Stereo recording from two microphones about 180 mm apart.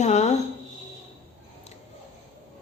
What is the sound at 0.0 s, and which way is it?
Speech, 40° left (ahead or behind).